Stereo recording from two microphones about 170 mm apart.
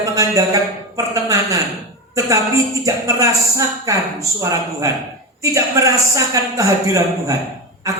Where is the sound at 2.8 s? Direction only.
20° right (ahead or behind).